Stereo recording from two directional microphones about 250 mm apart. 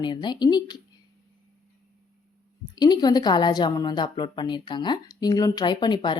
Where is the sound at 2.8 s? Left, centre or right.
Centre.